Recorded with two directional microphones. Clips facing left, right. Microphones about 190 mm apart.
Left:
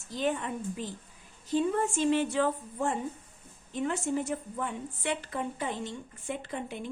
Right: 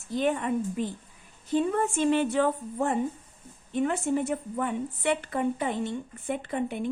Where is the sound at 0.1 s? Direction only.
55° right (ahead or behind).